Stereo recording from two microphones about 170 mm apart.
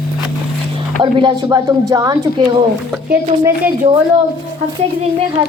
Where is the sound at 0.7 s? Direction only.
30° right (ahead or behind).